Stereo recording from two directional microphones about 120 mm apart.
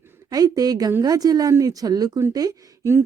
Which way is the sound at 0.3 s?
30° right (ahead or behind).